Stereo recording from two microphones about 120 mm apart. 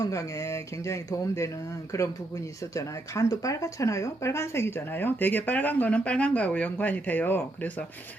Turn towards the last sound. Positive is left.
turn(degrees=15)  # may be behind; listen again after turning